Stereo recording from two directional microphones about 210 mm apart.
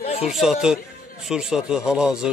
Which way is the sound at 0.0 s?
30° left (ahead or behind).